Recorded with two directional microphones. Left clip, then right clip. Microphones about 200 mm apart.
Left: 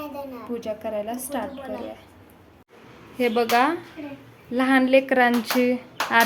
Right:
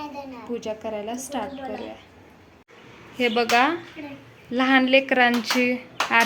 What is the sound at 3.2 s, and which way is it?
Speech, 5° left (ahead or behind).